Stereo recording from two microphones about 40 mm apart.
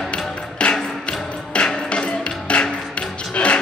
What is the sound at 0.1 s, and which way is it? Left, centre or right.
Music, left.